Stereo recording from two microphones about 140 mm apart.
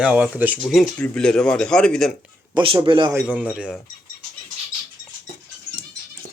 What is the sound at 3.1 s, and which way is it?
Speech, 10° right (ahead or behind).